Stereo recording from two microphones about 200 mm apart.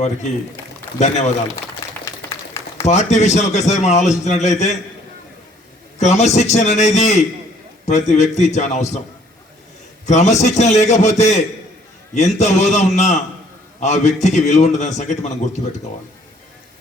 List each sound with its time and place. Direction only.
0.9 s a man's voice: 35° left (ahead or behind)
1.8 s a sound: 15° left (ahead or behind)
2.8 s a man's voice: 35° left (ahead or behind)
6.0 s a man's voice: 35° left (ahead or behind)
10.1 s a man's voice: 35° left (ahead or behind)